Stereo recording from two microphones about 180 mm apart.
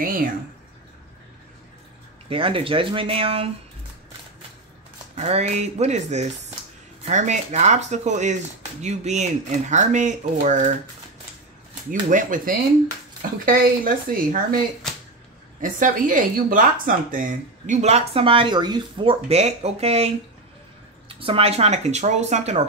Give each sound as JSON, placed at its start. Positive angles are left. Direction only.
{"t": 0.0, "sound": "speech", "side_deg": -50}
{"t": 2.2, "sound": "speech", "side_deg": -30}
{"t": 5.1, "sound": "speech", "side_deg": -35}
{"t": 11.9, "sound": "speech", "side_deg": -45}
{"t": 15.6, "sound": "speech", "side_deg": -50}
{"t": 21.1, "sound": "speech", "side_deg": -30}